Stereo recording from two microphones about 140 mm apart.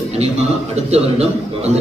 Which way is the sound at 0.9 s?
50° right (ahead or behind).